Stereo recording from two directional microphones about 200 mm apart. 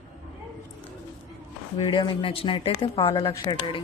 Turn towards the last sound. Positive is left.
turn(degrees=25)  # may be behind; listen again after turning